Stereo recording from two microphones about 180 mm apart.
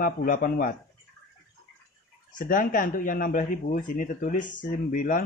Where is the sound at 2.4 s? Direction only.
50° left (ahead or behind).